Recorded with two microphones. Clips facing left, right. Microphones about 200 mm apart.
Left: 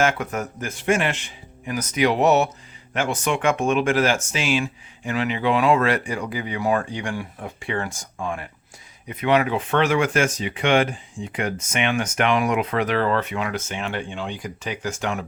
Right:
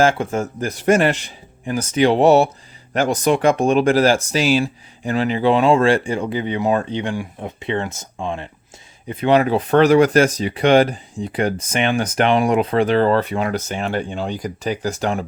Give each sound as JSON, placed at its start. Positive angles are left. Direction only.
{"t": 0.0, "sound": "speech", "side_deg": -30}